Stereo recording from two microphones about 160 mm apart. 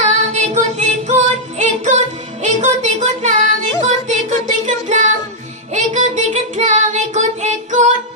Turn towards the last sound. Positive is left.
turn(degrees=-50)  # may be behind; listen again after turning